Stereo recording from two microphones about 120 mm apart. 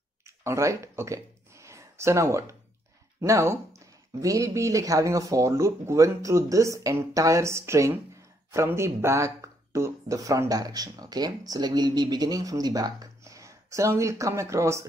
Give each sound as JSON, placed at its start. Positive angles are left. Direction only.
{"t": 0.4, "sound": "speech", "side_deg": -25}